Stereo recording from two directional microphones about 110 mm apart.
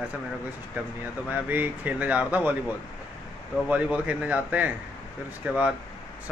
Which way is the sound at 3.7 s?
15° right (ahead or behind).